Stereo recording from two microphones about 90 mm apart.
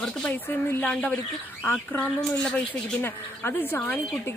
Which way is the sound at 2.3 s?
5° left (ahead or behind).